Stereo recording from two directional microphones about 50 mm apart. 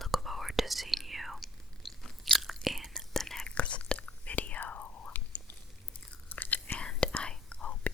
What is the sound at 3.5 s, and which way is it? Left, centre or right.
Whispering, left.